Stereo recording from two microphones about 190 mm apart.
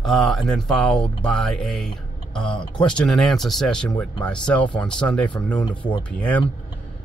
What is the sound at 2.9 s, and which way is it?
Speech, 5° left (ahead or behind).